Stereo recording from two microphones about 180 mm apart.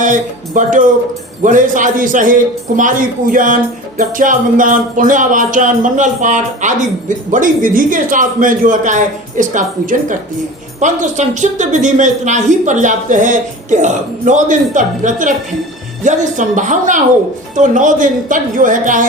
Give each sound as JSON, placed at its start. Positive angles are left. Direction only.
{"t": 0.0, "sound": "a man's voice", "side_deg": -45}